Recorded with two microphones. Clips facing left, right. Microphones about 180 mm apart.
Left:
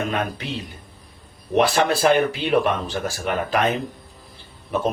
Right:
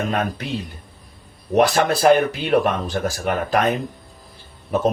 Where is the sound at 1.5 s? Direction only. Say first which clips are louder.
Right 2 dB; 40° right (ahead or behind).